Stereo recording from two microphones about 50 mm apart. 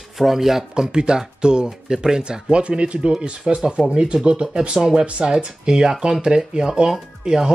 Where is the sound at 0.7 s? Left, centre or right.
Centre.